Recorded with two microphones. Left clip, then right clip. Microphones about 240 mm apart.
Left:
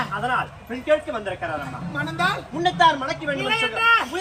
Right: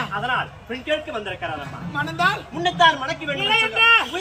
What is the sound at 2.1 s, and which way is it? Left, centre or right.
Speech, centre.